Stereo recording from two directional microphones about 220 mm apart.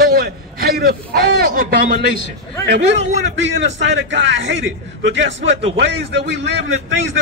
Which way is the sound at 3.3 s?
55° right (ahead or behind).